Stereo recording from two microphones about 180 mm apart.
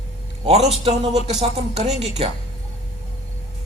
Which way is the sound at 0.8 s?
30° right (ahead or behind).